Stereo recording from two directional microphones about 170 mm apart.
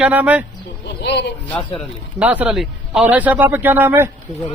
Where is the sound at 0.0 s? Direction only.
10° right (ahead or behind).